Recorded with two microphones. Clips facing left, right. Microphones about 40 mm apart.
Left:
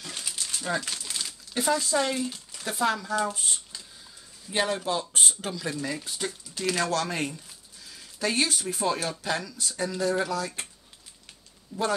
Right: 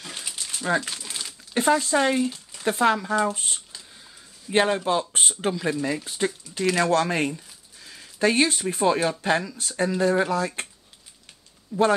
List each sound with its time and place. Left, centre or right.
0.0 s crumpling: centre
1.5 s speech: right
2.2 s a sound: centre
2.6 s speech: right
3.3 s a sound: centre
4.5 s speech: right
11.7 s speech: centre